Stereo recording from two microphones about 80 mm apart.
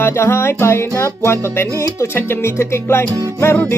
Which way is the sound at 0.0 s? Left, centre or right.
Left.